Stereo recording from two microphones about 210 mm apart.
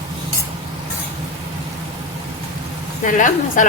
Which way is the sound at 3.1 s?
40° left (ahead or behind).